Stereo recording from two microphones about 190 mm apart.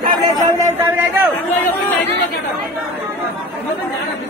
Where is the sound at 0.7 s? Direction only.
10° right (ahead or behind).